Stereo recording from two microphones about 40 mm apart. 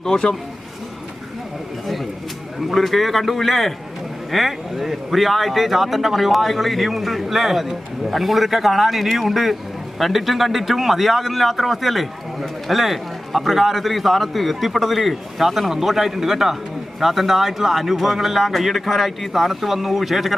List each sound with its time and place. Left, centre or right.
0.0 s speech: centre
2.6 s a man's voice: centre